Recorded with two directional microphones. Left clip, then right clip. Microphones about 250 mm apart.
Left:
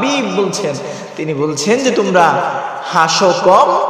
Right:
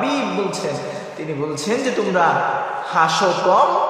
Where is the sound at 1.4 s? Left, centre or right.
Left.